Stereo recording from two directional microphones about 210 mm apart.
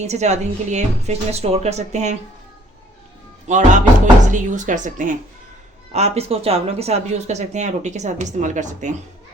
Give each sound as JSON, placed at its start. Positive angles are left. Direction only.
{"t": 0.0, "sound": "speech", "side_deg": -30}
{"t": 3.5, "sound": "speech", "side_deg": -35}